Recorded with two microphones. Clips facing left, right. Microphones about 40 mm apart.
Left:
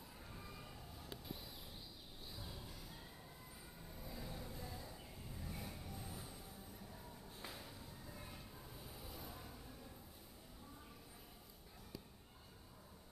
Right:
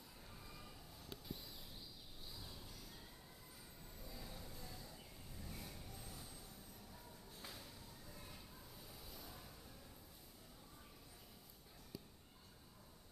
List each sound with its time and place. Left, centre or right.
0.3 s a sound: centre
3.9 s vehicle: centre
6.9 s music: centre